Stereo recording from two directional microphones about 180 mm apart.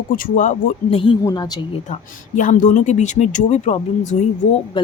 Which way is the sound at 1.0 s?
25° left (ahead or behind).